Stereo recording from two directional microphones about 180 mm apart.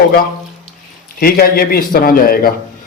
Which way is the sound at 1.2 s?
55° left (ahead or behind).